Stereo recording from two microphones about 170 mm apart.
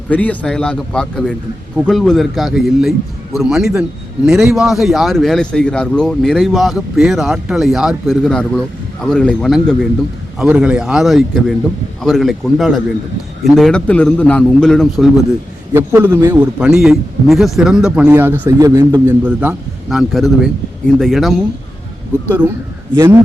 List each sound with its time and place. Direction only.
0.1 s a man's voice: 10° left (ahead or behind)
15.7 s a man's voice: 15° right (ahead or behind)
19.2 s a man's voice: 10° right (ahead or behind)
22.3 s a man's voice: 10° right (ahead or behind)